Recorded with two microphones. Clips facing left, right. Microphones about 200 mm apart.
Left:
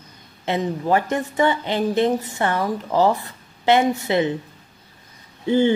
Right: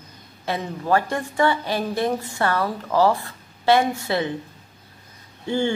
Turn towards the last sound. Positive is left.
turn(degrees=20)  # may be behind; listen again after turning